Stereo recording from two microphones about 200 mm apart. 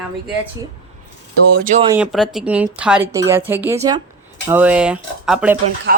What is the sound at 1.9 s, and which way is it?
Speech, 5° right (ahead or behind).